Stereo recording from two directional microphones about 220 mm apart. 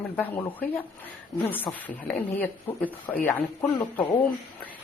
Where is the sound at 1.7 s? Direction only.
10° left (ahead or behind).